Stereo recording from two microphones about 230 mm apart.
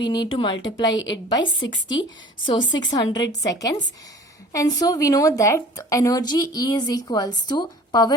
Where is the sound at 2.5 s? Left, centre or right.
Centre.